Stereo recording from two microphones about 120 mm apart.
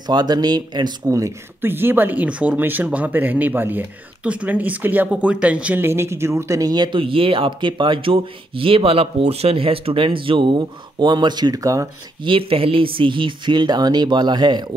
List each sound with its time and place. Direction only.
0.0 s speech: 35° right (ahead or behind)
12.2 s speech: 50° right (ahead or behind)